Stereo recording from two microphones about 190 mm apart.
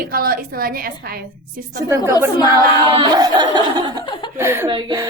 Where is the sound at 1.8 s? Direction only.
20° right (ahead or behind).